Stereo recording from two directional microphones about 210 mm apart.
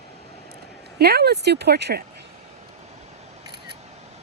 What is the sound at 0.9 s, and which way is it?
Speech, 50° right (ahead or behind).